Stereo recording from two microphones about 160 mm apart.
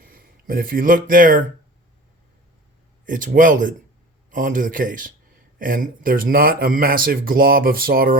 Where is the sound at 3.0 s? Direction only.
55° right (ahead or behind).